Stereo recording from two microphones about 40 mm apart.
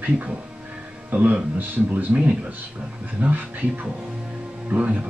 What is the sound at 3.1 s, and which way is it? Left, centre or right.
A man's voice, right.